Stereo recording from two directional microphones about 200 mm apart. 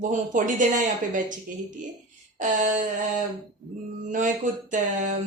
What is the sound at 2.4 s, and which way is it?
Speech, 40° right (ahead or behind).